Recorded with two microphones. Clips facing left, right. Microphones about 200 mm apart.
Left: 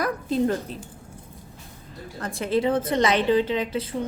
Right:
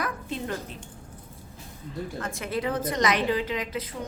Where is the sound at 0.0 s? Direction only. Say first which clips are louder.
Left 9 dB; 40° left (ahead or behind).